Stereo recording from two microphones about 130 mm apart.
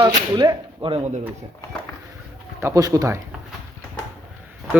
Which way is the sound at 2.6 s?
25° right (ahead or behind).